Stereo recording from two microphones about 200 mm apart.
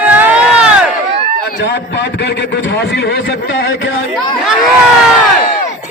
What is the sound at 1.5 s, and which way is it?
A man's voice, 60° left (ahead or behind).